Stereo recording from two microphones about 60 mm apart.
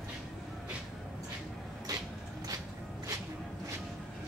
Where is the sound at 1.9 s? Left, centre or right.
Right.